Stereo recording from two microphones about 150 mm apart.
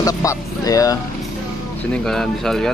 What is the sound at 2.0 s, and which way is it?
Speech, 5° left (ahead or behind).